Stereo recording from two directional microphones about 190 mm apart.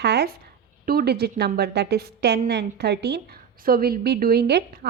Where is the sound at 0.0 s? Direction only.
60° right (ahead or behind).